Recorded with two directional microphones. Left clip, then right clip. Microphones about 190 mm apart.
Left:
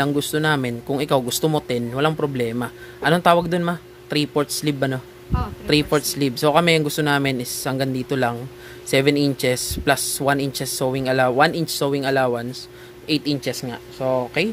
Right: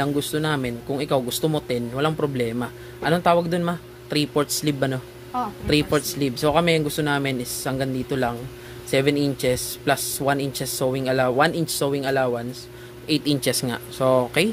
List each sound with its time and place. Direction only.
0.0 s speech: 20° left (ahead or behind)
13.0 s speech: 10° left (ahead or behind); by 14.3 s 10° right (ahead or behind)